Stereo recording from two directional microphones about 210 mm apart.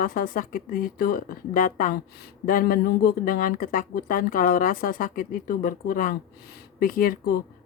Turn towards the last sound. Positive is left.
turn(degrees=45)  # may be behind; listen again after turning